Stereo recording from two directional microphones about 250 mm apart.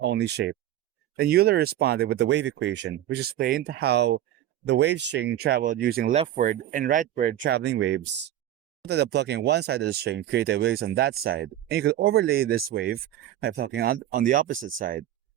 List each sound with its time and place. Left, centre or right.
0.0 s speech: right
7.4 s speech: right